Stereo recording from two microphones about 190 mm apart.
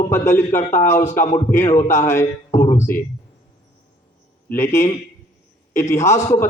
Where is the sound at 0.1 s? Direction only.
15° left (ahead or behind).